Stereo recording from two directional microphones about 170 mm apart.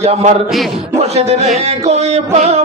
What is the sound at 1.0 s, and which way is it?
Speech, 40° right (ahead or behind).